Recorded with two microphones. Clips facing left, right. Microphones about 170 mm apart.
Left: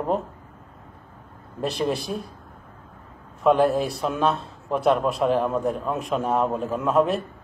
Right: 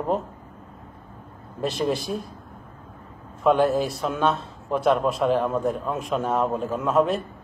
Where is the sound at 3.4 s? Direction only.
Centre (ahead or behind).